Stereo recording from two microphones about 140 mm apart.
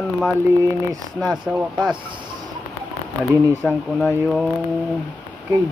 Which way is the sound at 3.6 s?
Centre (ahead or behind).